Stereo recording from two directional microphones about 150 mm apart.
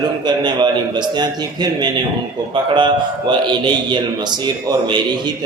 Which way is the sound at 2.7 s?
30° right (ahead or behind).